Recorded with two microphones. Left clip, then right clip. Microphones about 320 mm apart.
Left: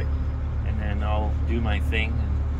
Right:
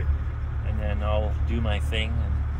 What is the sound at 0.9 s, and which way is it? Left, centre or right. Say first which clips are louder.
Speech: right 1 dB; centre.